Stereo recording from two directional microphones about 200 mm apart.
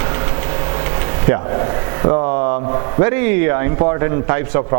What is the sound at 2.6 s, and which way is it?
A man's voice, 25° right (ahead or behind).